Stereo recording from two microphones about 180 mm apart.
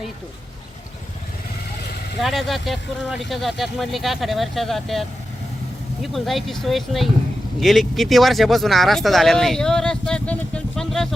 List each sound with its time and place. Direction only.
2.2 s speech: centre (ahead or behind)